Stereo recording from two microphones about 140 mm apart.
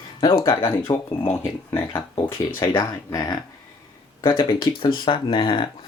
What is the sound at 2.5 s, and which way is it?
Speech, 25° left (ahead or behind).